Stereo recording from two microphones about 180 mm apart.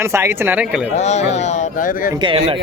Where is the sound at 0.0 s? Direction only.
15° right (ahead or behind).